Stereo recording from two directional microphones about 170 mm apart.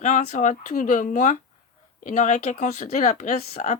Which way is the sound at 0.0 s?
50° left (ahead or behind).